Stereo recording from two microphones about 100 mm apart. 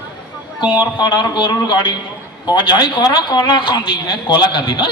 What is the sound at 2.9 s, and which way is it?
A man's voice, 45° left (ahead or behind).